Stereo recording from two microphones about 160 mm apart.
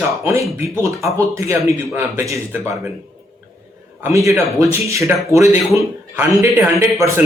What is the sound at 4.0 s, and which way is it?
Speech, 20° right (ahead or behind).